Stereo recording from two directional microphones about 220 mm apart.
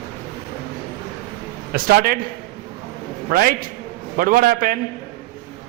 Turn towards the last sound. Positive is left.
turn(degrees=-40)  # may be behind; listen again after turning